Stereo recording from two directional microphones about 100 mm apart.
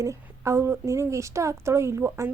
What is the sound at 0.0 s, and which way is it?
A woman's voice, 30° right (ahead or behind).